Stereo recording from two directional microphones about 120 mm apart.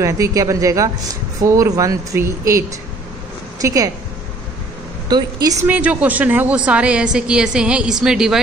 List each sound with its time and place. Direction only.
0.0 s speech: 25° right (ahead or behind)
3.6 s speech: 30° right (ahead or behind)
5.0 s a woman's voice: 35° right (ahead or behind)
5.7 s speech: 10° right (ahead or behind)